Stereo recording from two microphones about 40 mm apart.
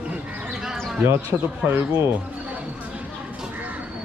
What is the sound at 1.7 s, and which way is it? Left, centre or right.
Speech, right.